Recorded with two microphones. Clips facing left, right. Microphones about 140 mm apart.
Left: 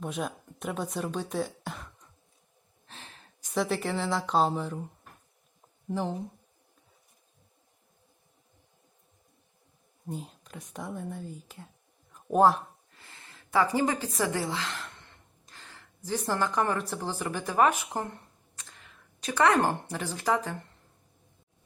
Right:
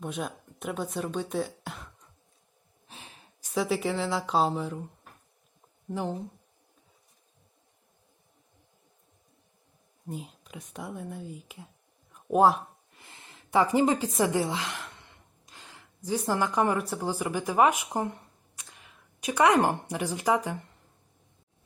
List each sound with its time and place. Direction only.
0.0 s speech: centre (ahead or behind)
2.8 s a sound: 10° right (ahead or behind)
3.6 s speech: centre (ahead or behind)
5.9 s speech: centre (ahead or behind)
10.1 s speech: centre (ahead or behind)
12.1 s a sound: 5° right (ahead or behind)
12.9 s a woman's voice: 20° right (ahead or behind)